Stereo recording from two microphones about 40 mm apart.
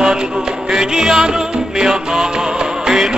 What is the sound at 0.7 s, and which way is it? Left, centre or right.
Music, centre.